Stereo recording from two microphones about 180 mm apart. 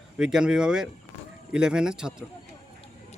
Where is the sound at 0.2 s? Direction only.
5° right (ahead or behind).